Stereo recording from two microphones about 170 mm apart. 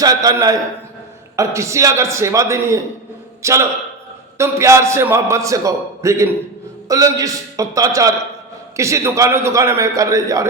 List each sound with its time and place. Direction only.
0.0 s a man's voice: 20° right (ahead or behind)